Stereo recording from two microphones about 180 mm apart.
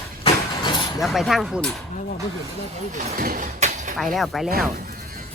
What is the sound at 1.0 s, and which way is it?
Speech, centre (ahead or behind).